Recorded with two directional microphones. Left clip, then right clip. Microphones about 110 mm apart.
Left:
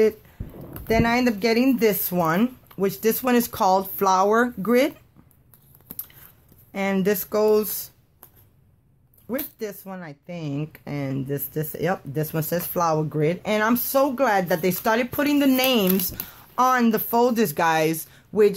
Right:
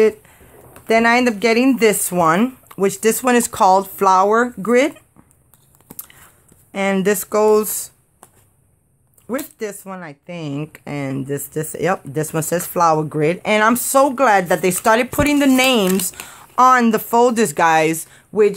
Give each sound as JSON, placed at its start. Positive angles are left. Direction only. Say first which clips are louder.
{"t": 0.8, "sound": "speech", "louder": "right 7 dB", "side_deg": -35}
{"t": 5.9, "sound": "biting", "louder": "right 5 dB", "side_deg": -25}
{"t": 6.7, "sound": "speech", "louder": "right 6 dB", "side_deg": -30}
{"t": 9.3, "sound": "speech", "louder": "right 5 dB", "side_deg": -30}